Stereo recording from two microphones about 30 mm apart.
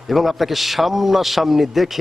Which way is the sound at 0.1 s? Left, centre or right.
Centre.